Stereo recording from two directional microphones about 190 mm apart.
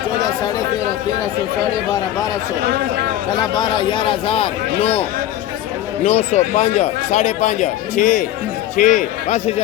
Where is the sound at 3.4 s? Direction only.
20° left (ahead or behind).